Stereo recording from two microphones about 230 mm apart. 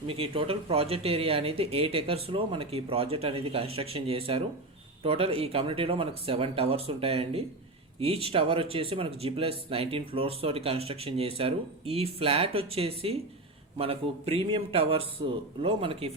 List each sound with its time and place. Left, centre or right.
0.1 s speech: right